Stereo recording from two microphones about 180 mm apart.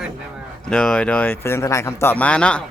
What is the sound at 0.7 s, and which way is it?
Speech, 5° left (ahead or behind).